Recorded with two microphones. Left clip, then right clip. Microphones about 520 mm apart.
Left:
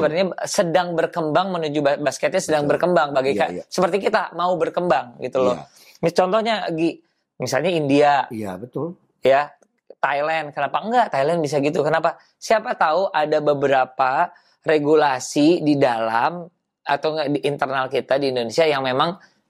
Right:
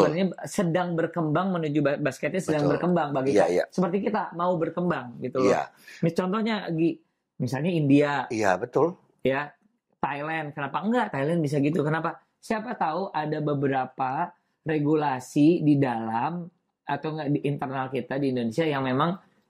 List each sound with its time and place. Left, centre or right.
0.1 s speech: left
6.7 s a sound: centre
7.5 s speech: left
8.4 s speech: right
9.2 s speech: left
15.3 s speech: centre
15.8 s speech: left